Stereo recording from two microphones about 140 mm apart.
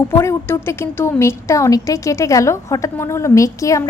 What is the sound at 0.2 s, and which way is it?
A woman's voice, 20° left (ahead or behind).